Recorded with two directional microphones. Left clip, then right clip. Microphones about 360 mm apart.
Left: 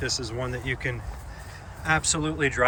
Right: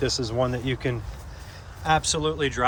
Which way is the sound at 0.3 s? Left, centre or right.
Centre.